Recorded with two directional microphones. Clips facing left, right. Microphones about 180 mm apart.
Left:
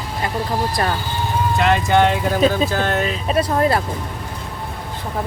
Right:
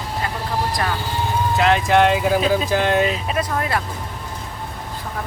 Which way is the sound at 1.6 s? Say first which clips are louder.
Even; centre (ahead or behind).